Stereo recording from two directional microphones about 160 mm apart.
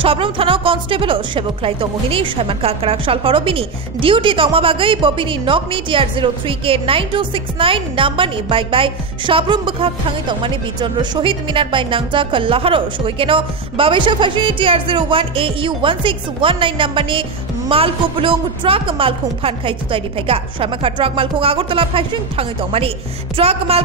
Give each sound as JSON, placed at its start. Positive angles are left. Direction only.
{"t": 0.0, "sound": "speech", "side_deg": -35}